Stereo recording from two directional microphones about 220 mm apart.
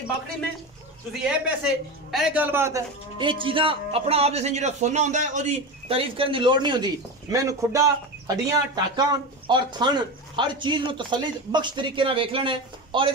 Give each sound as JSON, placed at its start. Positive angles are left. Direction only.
{"t": 1.2, "sound": "a man's voice", "side_deg": 0}